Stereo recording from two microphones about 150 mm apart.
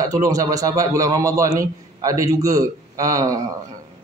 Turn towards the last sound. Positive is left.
turn(degrees=-25)  # may be behind; listen again after turning